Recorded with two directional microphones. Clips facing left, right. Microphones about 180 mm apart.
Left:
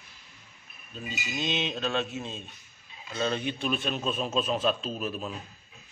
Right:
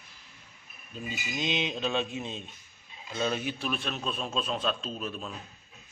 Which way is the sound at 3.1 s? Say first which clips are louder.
Left 1 dB; 10° right (ahead or behind).